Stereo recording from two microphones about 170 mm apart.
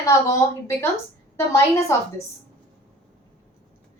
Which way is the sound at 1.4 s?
15° left (ahead or behind).